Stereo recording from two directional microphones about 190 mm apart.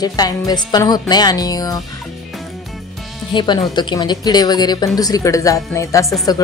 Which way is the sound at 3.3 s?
25° left (ahead or behind).